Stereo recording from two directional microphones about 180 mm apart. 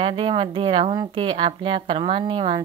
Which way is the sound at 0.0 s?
30° right (ahead or behind).